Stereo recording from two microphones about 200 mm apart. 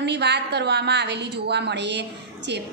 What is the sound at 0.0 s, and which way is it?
A woman's voice, 60° right (ahead or behind).